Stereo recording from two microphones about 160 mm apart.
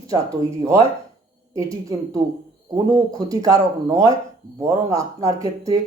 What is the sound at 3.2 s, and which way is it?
Speech, 20° right (ahead or behind).